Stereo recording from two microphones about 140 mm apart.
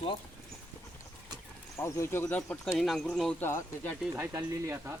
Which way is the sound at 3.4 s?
15° left (ahead or behind).